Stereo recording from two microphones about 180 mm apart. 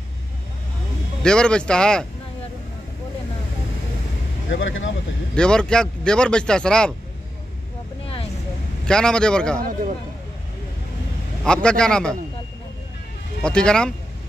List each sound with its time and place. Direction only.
1.2 s speech: 5° left (ahead or behind)
4.5 s speech: 90° left
5.3 s speech: 5° left (ahead or behind)
8.8 s speech: 5° left (ahead or behind)
11.4 s speech: 5° left (ahead or behind)
13.4 s speech: 5° left (ahead or behind)